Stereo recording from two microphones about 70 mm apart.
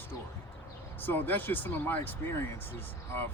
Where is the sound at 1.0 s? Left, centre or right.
Left.